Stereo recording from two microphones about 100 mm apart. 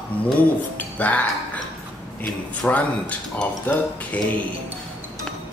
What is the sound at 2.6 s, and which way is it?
Speech, 10° left (ahead or behind).